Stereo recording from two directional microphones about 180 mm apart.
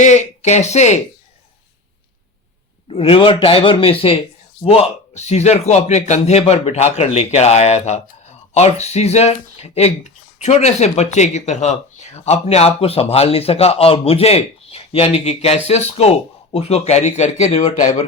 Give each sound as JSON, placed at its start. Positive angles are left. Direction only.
{"t": 0.0, "sound": "speech", "side_deg": 40}
{"t": 2.8, "sound": "a man's voice", "side_deg": 30}